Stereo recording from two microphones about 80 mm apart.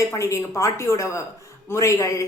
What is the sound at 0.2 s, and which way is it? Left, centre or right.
A woman's voice, left.